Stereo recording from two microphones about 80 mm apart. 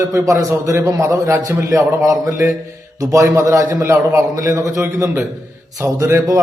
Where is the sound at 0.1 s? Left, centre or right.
Right.